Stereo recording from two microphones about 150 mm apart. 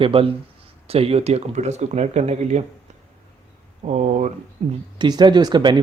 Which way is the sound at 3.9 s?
50° right (ahead or behind).